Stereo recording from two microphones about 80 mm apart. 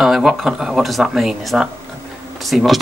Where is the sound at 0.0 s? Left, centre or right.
Centre.